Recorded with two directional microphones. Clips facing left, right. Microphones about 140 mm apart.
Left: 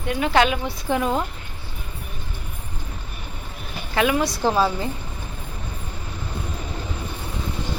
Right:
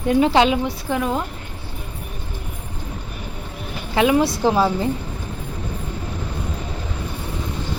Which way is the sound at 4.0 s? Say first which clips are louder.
Right 4 dB; 25° right (ahead or behind).